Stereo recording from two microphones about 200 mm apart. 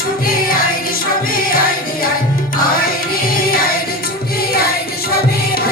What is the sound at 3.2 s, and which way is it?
Music, 45° left (ahead or behind).